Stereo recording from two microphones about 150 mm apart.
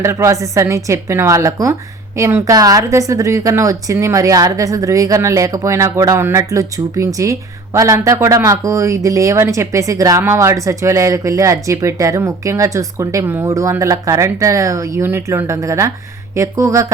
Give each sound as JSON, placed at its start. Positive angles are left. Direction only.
{"t": 0.0, "sound": "a woman's voice", "side_deg": -20}